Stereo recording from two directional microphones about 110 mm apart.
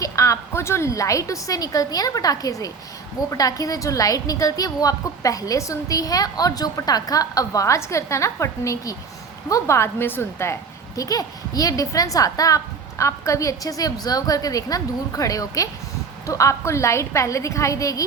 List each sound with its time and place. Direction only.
0.0 s a woman's voice: 30° left (ahead or behind)